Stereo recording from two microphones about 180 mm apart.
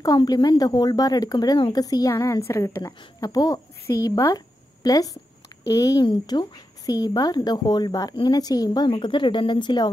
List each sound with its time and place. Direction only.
0.0 s speech: 20° left (ahead or behind)